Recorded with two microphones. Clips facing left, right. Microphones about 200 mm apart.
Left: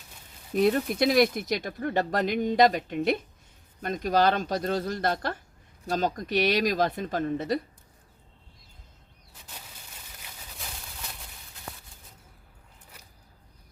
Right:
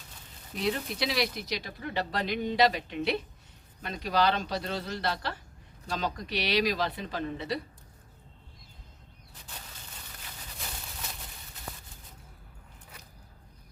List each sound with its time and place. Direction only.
0.5 s speech: 50° left (ahead or behind)